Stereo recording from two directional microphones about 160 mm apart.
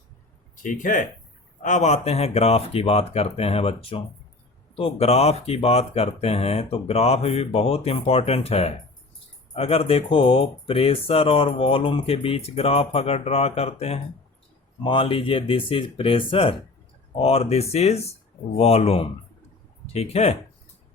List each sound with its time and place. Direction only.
0.5 s speech: 55° left (ahead or behind); by 20.3 s 40° left (ahead or behind)